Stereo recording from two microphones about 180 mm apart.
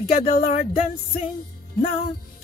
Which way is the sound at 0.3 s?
45° left (ahead or behind).